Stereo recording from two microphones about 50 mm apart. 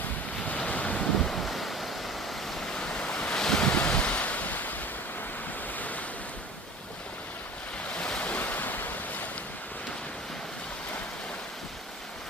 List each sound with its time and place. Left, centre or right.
0.4 s waves: left
1.1 s waves: centre
2.7 s waves: centre; by 4.7 s left
7.9 s waves: left
8.2 s waves: left